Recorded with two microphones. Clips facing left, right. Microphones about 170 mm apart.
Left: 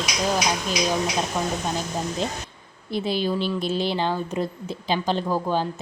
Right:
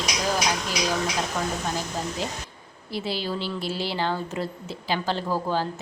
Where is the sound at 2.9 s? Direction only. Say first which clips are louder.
Left 5 dB; 20° left (ahead or behind).